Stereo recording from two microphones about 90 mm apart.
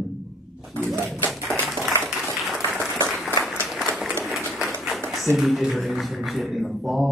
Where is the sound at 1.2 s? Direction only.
20° left (ahead or behind).